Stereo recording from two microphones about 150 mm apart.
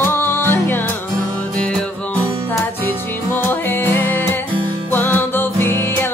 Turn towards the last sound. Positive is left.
turn(degrees=15)  # may be behind; listen again after turning